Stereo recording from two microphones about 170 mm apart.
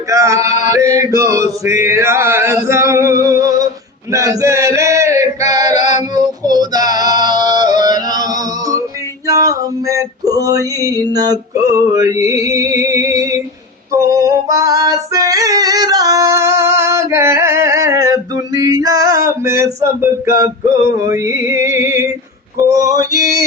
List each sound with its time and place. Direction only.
0.1 s chant: 20° right (ahead or behind)
5.8 s child singing: 45° left (ahead or behind)
6.1 s female singing: 20° right (ahead or behind)
9.2 s male singing: 20° right (ahead or behind)
13.9 s female singing: 20° right (ahead or behind)
22.5 s male singing: 20° right (ahead or behind)